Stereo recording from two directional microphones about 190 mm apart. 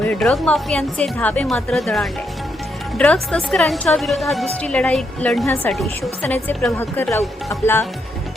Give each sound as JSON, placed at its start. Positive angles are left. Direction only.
{"t": 0.0, "sound": "a woman's voice", "side_deg": 5}